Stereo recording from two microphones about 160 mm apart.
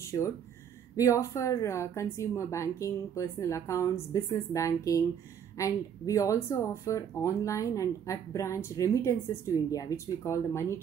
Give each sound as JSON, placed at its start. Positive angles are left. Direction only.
{"t": 0.9, "sound": "speech", "side_deg": 20}